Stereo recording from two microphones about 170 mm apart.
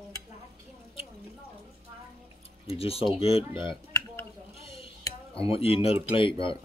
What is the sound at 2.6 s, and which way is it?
Speech, 35° left (ahead or behind).